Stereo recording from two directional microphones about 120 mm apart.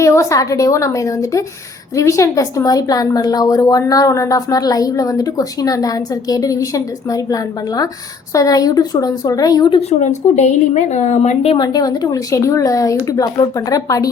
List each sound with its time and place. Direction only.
0.0 s a woman's voice: 25° left (ahead or behind)
9.6 s speech: 45° left (ahead or behind)
10.0 s a woman's voice: 75° left (ahead or behind)
11.5 s speech: 35° left (ahead or behind)